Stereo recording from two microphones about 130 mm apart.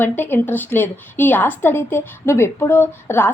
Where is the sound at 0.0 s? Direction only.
15° left (ahead or behind).